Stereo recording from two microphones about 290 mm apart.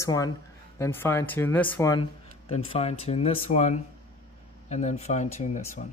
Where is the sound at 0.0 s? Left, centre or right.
Centre.